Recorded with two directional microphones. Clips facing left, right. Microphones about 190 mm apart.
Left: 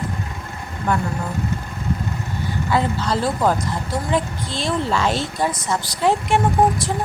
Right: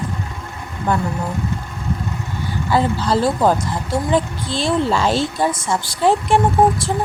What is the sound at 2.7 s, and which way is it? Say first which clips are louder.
Speech: right 3 dB; 30° right (ahead or behind).